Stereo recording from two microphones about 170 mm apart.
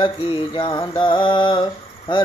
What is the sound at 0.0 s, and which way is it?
Mantra, 30° left (ahead or behind).